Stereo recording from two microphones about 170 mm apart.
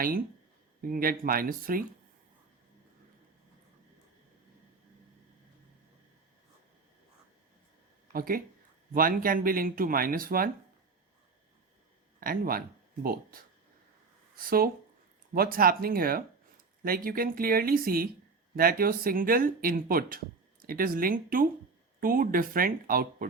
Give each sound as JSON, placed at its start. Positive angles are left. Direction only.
{"t": 0.8, "sound": "speech", "side_deg": -55}
{"t": 8.1, "sound": "speech", "side_deg": -60}
{"t": 12.2, "sound": "speech", "side_deg": -55}